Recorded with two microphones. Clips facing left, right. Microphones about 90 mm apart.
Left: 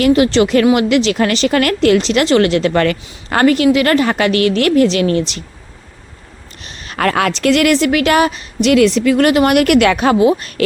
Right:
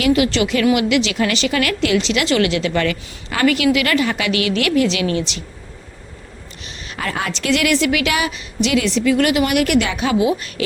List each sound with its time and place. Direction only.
0.0 s a woman's voice: 35° left (ahead or behind)
6.7 s a woman's voice: 55° left (ahead or behind)